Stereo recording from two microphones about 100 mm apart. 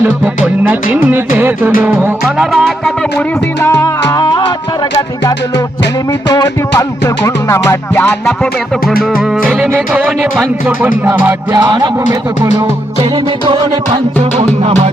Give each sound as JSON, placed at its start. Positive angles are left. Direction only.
{"t": 0.4, "sound": "music", "side_deg": -15}
{"t": 2.5, "sound": "a sound", "side_deg": 0}
{"t": 3.6, "sound": "music", "side_deg": 30}
{"t": 9.1, "sound": "music", "side_deg": -10}
{"t": 11.5, "sound": "speech", "side_deg": -40}
{"t": 13.5, "sound": "music", "side_deg": -65}